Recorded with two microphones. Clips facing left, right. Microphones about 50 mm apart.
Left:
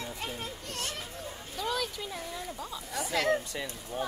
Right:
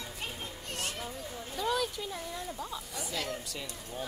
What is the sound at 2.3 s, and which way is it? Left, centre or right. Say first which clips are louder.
Speech: even; centre.